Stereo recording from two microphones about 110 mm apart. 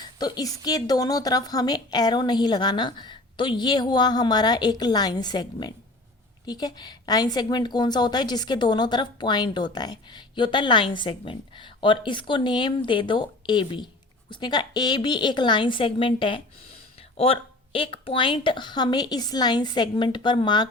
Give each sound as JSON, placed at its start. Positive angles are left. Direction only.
{"t": 0.0, "sound": "a woman's voice", "side_deg": 40}